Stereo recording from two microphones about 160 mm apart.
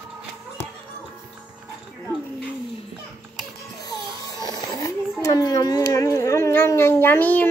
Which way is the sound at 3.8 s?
25° left (ahead or behind).